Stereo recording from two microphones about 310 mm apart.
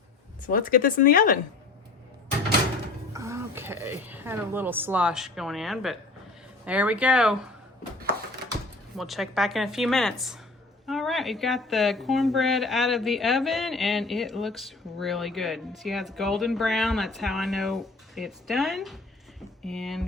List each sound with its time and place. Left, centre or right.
0.4 s speech: left
3.1 s a woman's voice: centre
9.0 s a woman's voice: centre